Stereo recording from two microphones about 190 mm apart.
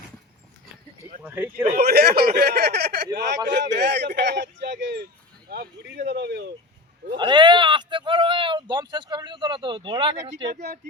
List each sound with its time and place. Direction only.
1.2 s speech: 10° right (ahead or behind)
1.7 s speech: 55° right (ahead or behind)
7.2 s speech: 25° right (ahead or behind)